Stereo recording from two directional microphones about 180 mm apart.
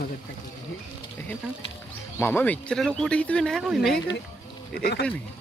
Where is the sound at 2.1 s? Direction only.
10° left (ahead or behind).